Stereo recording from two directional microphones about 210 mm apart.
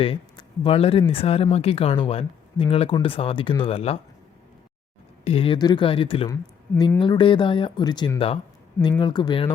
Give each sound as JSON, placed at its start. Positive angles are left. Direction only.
{"t": 0.0, "sound": "speech", "side_deg": 25}
{"t": 5.2, "sound": "speech", "side_deg": 25}